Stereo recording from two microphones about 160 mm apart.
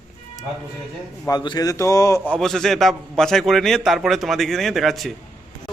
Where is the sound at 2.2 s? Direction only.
5° left (ahead or behind).